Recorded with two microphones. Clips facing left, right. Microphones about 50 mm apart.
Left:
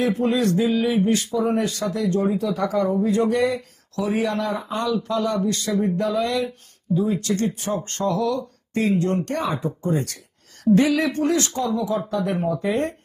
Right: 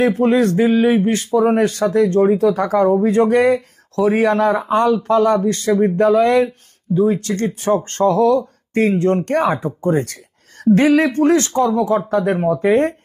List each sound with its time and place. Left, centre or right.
0.0 s speech: right